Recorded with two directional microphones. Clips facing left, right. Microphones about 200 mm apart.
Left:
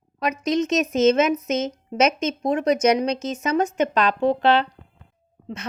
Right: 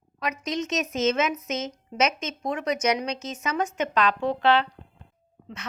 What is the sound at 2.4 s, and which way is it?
A woman's voice, 35° left (ahead or behind).